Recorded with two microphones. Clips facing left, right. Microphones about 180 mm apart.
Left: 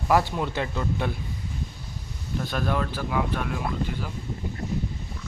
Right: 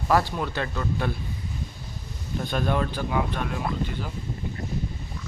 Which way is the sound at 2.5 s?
Centre (ahead or behind).